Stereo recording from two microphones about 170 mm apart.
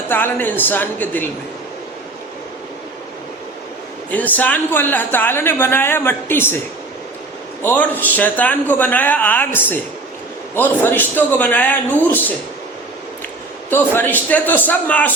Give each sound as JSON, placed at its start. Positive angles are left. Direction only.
{"t": 0.1, "sound": "speech", "side_deg": 10}
{"t": 4.1, "sound": "speech", "side_deg": 10}
{"t": 7.6, "sound": "speech", "side_deg": 10}
{"t": 13.7, "sound": "speech", "side_deg": 10}